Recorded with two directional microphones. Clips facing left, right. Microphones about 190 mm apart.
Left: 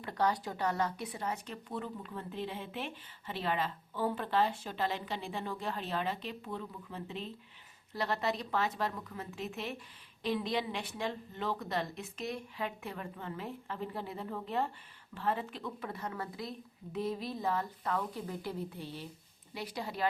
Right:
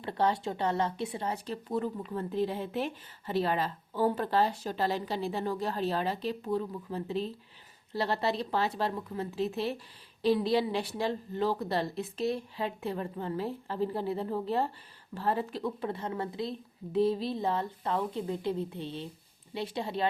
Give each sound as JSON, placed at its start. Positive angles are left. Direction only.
{"t": 0.0, "sound": "speech", "side_deg": -30}